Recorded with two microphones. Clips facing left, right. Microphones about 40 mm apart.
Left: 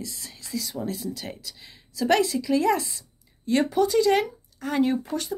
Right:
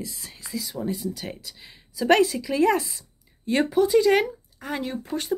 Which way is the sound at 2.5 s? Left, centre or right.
Right.